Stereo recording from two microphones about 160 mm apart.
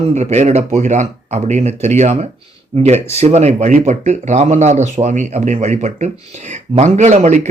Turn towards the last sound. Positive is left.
turn(degrees=-50)  # may be behind; listen again after turning